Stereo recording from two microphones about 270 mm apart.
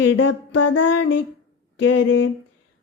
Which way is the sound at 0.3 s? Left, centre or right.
Left.